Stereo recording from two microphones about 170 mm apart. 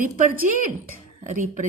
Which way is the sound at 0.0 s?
50° right (ahead or behind).